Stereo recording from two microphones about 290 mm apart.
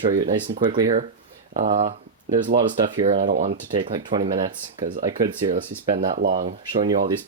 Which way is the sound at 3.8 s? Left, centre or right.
Centre.